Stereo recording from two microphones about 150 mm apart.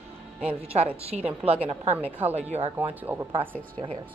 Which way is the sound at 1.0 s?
40° right (ahead or behind).